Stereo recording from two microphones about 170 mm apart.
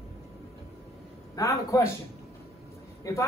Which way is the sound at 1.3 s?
20° left (ahead or behind).